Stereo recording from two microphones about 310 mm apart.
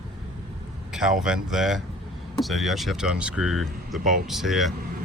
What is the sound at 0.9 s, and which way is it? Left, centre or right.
Speech, centre.